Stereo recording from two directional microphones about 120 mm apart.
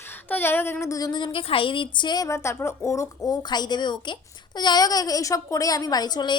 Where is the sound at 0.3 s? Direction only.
15° left (ahead or behind).